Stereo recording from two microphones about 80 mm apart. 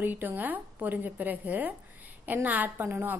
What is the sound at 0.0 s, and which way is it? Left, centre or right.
Speech, right.